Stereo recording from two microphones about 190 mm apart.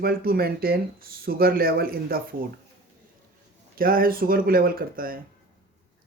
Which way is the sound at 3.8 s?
50° right (ahead or behind).